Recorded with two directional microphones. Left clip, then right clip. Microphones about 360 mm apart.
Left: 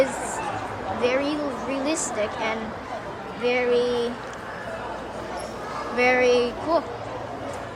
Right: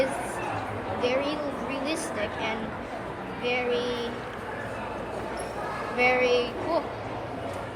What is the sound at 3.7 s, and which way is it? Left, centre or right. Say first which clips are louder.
Speech: left 7 dB; left.